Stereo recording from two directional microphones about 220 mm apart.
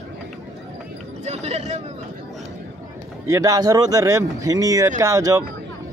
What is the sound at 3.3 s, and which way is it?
Speech, 15° right (ahead or behind).